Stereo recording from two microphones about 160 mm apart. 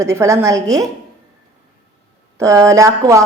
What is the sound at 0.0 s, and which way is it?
Speech, 20° right (ahead or behind).